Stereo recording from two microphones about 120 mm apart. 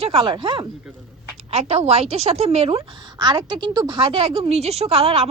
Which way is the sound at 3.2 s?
35° right (ahead or behind).